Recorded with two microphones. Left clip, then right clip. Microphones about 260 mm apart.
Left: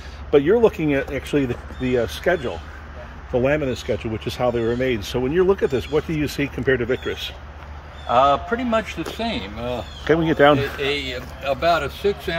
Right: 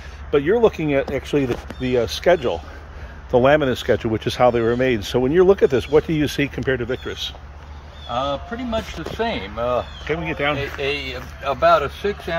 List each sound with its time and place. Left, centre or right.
0.3 s speech: centre
6.5 s speech: centre
8.1 s speech: centre
10.1 s speech: left
10.8 s speech: centre